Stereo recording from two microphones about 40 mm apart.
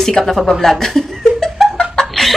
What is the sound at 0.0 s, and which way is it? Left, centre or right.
Speech, centre.